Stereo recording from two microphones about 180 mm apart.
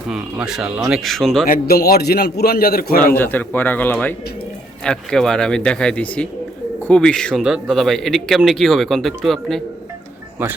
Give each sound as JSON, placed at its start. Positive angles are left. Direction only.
{"t": 0.1, "sound": "speech", "side_deg": -5}
{"t": 1.5, "sound": "a man's voice", "side_deg": 60}
{"t": 3.2, "sound": "a man's voice", "side_deg": 10}